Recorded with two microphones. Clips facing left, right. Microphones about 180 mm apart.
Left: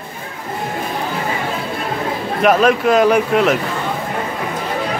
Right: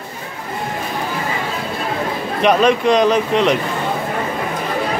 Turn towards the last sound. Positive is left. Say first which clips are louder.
# left 1 dB
turn(degrees=5)  # may be behind; listen again after turning